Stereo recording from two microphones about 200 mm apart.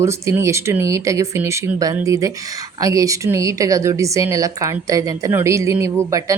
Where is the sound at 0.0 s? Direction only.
15° right (ahead or behind).